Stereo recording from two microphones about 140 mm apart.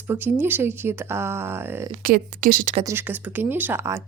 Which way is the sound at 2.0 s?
90° right.